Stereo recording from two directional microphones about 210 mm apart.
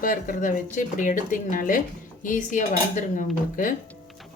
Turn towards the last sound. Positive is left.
turn(degrees=40)  # may be behind; listen again after turning